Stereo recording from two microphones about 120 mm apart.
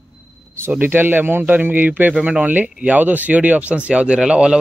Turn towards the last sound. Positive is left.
turn(degrees=-10)  # may be behind; listen again after turning